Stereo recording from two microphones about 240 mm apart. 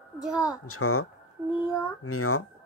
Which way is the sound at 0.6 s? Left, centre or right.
Left.